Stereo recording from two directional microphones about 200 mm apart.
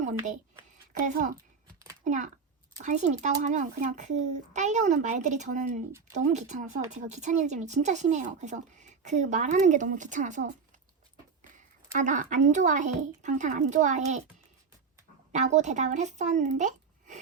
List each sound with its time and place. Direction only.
0.0 s a sound: 35° right (ahead or behind)
1.0 s speech: 40° right (ahead or behind)
11.9 s speech: 40° right (ahead or behind)
15.3 s speech: 35° right (ahead or behind)